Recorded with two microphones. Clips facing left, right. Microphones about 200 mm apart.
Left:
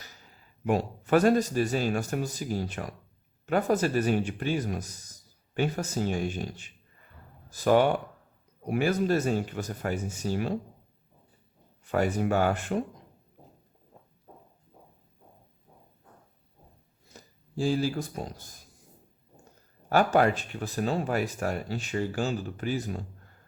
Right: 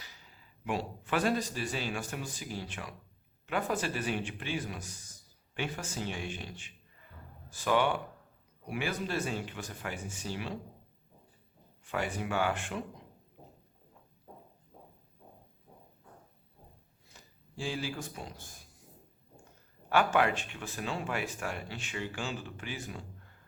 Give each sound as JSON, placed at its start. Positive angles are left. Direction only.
{"t": 0.0, "sound": "a man's voice", "side_deg": 45}
{"t": 11.9, "sound": "a man's voice", "side_deg": 40}
{"t": 17.1, "sound": "speech", "side_deg": 40}
{"t": 19.9, "sound": "a man's voice", "side_deg": 40}